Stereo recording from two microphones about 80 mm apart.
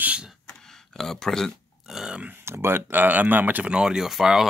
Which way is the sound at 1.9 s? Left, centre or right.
Centre.